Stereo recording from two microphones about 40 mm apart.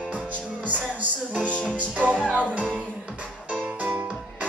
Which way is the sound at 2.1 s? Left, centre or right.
Left.